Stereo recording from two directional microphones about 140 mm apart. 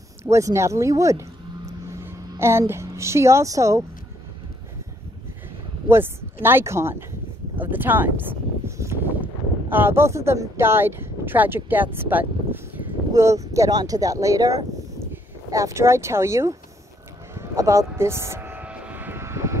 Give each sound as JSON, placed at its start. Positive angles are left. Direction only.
{"t": 0.2, "sound": "speech", "side_deg": -20}
{"t": 6.4, "sound": "speech", "side_deg": -20}
{"t": 17.3, "sound": "vehicle", "side_deg": -20}